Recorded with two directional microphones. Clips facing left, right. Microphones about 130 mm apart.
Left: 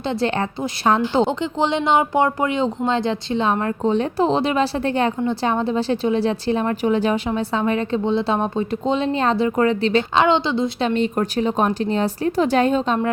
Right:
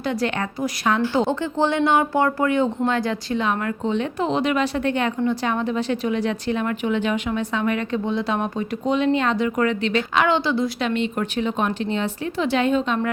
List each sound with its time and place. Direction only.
0.0 s a woman's voice: 25° left (ahead or behind)